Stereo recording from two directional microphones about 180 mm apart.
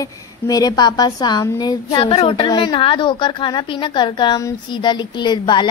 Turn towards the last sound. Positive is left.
turn(degrees=25)  # may be behind; listen again after turning